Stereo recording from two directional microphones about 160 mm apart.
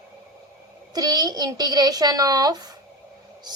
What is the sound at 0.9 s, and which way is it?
A woman's voice, 25° right (ahead or behind).